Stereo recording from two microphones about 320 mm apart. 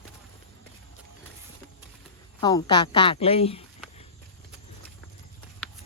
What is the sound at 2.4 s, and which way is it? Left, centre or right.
A woman's voice, centre.